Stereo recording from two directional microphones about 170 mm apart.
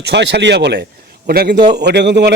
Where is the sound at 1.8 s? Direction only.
85° right.